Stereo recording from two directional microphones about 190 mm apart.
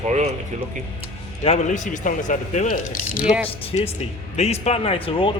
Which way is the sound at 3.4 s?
30° left (ahead or behind).